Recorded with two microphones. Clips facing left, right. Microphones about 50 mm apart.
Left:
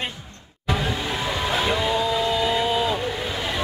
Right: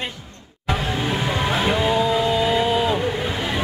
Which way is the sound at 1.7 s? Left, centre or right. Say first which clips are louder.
Right 5 dB; centre.